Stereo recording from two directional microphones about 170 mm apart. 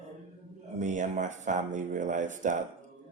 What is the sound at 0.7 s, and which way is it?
Speech, 45° right (ahead or behind).